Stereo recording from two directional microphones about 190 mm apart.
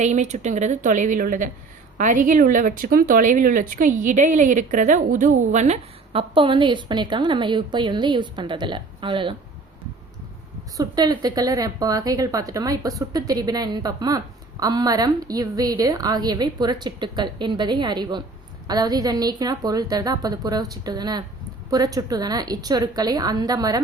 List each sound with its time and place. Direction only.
0.0 s speech: 40° right (ahead or behind)
10.8 s a woman's voice: 20° right (ahead or behind)